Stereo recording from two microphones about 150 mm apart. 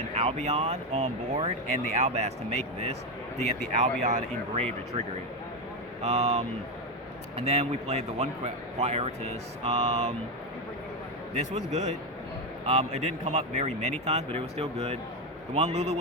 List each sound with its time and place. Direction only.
0.1 s a man's voice: 45° right (ahead or behind)
7.4 s a man's voice: 45° right (ahead or behind)
11.3 s a man's voice: 50° right (ahead or behind)